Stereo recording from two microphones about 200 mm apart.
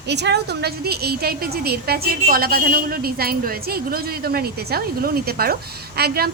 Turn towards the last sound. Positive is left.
turn(degrees=-50)  # may be behind; listen again after turning